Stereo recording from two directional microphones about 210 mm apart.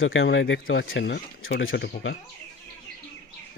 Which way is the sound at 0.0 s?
70° left (ahead or behind).